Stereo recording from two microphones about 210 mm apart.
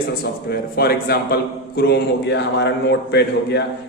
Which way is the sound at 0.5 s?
50° left (ahead or behind).